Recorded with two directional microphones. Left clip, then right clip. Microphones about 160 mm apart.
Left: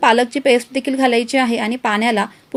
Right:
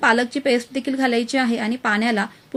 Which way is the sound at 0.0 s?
30° left (ahead or behind).